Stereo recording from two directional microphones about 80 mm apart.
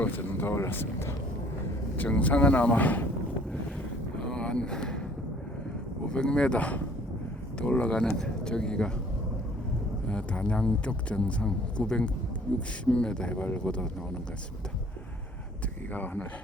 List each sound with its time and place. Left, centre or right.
0.0 s speech: left
2.0 s speech: centre
4.3 s vehicle: centre
6.1 s speech: centre
10.1 s speech: centre
15.9 s speech: left